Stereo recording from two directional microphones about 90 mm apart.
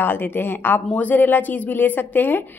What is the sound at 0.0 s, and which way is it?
A woman's voice, 25° left (ahead or behind).